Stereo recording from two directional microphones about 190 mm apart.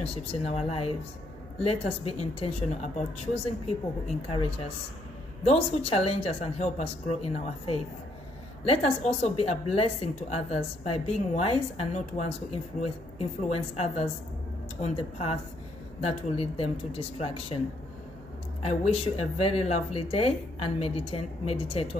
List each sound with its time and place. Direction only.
0.0 s a woman's voice: 30° left (ahead or behind)
18.6 s a woman's voice: 35° left (ahead or behind)